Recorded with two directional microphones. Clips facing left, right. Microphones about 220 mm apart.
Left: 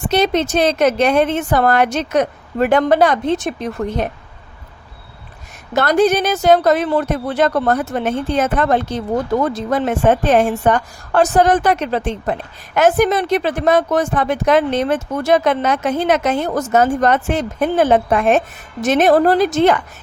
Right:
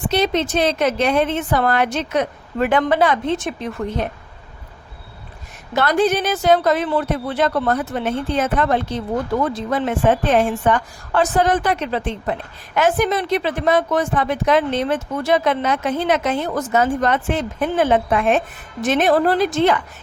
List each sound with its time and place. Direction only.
0.1 s speech: 45° left (ahead or behind)
5.7 s speech: 45° left (ahead or behind)